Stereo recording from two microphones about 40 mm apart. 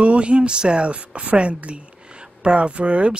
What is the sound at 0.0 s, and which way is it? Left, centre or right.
Speech, right.